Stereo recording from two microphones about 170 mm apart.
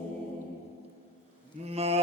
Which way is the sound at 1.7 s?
40° right (ahead or behind).